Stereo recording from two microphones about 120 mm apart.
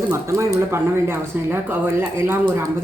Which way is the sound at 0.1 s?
25° right (ahead or behind).